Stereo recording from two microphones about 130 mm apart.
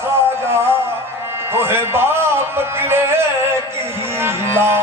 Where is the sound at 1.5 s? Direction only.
20° right (ahead or behind).